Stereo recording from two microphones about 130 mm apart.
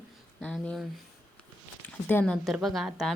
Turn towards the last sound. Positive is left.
turn(degrees=0)  # may be behind; listen again after turning